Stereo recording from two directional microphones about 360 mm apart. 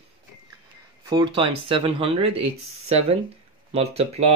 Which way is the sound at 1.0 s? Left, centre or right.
Centre.